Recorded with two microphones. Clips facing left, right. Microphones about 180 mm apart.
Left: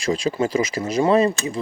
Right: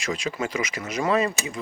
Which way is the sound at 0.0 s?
30° left (ahead or behind).